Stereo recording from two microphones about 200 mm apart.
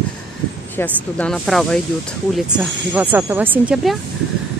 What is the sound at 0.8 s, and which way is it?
Speech, 5° left (ahead or behind).